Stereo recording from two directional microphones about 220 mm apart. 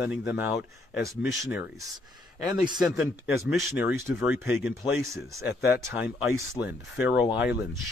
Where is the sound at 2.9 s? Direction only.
10° right (ahead or behind).